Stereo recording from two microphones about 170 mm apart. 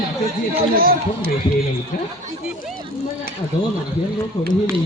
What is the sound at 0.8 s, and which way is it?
Speech, 60° right (ahead or behind).